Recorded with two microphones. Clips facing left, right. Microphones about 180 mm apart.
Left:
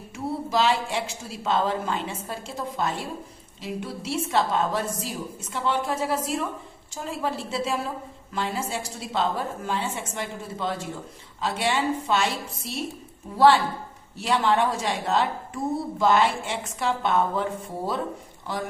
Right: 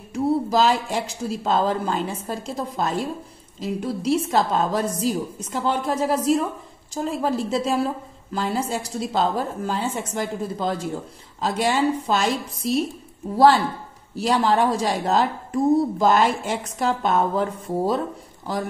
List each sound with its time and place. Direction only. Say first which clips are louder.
0.1 s a woman's voice: right 7 dB; 40° right (ahead or behind)
14.1 s a woman's voice: right 3 dB; 40° right (ahead or behind)